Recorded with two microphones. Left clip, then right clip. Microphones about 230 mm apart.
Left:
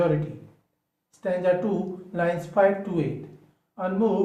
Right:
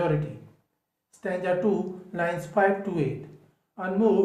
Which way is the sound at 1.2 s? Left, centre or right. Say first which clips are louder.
Left 2 dB; right.